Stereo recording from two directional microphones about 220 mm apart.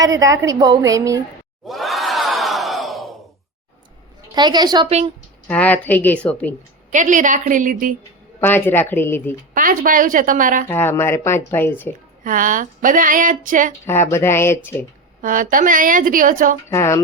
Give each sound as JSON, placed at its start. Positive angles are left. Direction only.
{"t": 0.2, "sound": "a woman's voice", "side_deg": -15}
{"t": 1.6, "sound": "crowd", "side_deg": 0}
{"t": 4.4, "sound": "a woman's voice", "side_deg": -20}
{"t": 5.5, "sound": "speech", "side_deg": 5}
{"t": 6.9, "sound": "speech", "side_deg": -35}
{"t": 8.4, "sound": "speech", "side_deg": 10}
{"t": 9.6, "sound": "speech", "side_deg": -40}
{"t": 10.7, "sound": "speech", "side_deg": 10}
{"t": 12.2, "sound": "speech", "side_deg": -35}
{"t": 13.8, "sound": "speech", "side_deg": 10}
{"t": 15.2, "sound": "speech", "side_deg": -35}
{"t": 16.6, "sound": "speech", "side_deg": 10}